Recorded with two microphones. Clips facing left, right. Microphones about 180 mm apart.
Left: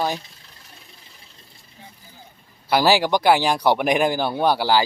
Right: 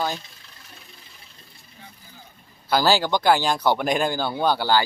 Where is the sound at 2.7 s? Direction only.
10° left (ahead or behind).